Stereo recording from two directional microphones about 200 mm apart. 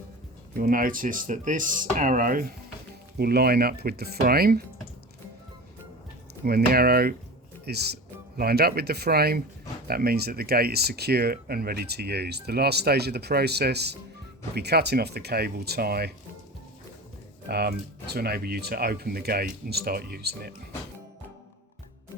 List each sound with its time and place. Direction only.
0.5 s speech: 45° right (ahead or behind)
6.4 s speech: 50° right (ahead or behind)
17.5 s speech: 55° right (ahead or behind)